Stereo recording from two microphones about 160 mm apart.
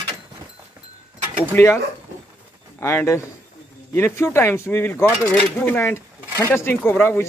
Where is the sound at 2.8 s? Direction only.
15° left (ahead or behind).